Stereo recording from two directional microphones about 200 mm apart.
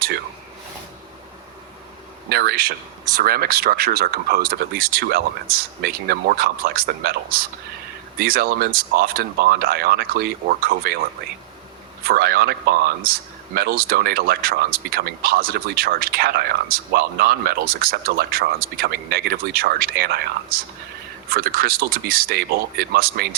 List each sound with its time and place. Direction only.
2.3 s a man's voice: 50° right (ahead or behind)
12.0 s a man's voice: 50° right (ahead or behind)